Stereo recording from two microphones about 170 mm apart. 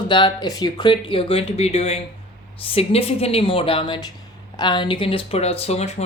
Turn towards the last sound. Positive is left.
turn(degrees=40)  # may be behind; listen again after turning